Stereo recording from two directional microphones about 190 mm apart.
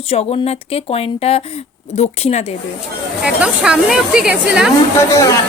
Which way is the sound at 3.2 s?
5° right (ahead or behind).